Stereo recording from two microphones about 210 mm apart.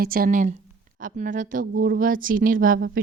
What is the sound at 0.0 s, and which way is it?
A woman's voice, 45° right (ahead or behind).